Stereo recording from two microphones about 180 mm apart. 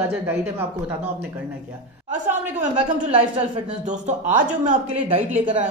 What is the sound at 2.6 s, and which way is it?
Speech, 45° right (ahead or behind).